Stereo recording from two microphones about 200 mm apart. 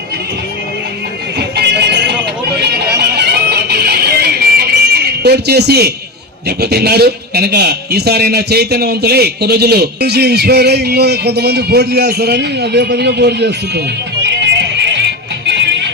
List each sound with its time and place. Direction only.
1.4 s music: 55° right (ahead or behind)
6.6 s a man's voice: 55° right (ahead or behind)
14.3 s music: 60° right (ahead or behind)